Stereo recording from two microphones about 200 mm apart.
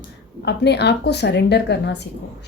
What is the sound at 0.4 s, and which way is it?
Speech, 55° left (ahead or behind).